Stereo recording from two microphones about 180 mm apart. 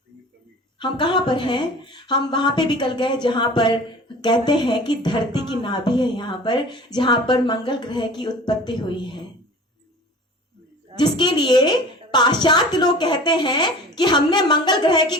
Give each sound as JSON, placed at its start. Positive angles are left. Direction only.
{"t": 0.8, "sound": "speech", "side_deg": 25}
{"t": 10.9, "sound": "speech", "side_deg": 25}